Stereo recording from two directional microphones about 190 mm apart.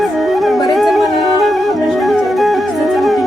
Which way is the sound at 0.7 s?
Centre (ahead or behind).